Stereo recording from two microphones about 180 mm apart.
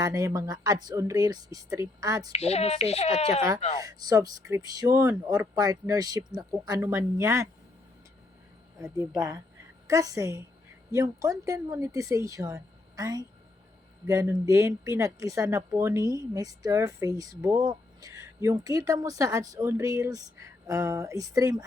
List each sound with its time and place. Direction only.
0.0 s speech: 20° right (ahead or behind)
2.3 s a child's voice: 35° left (ahead or behind)
3.8 s speech: 20° right (ahead or behind)
9.8 s speech: 20° right (ahead or behind)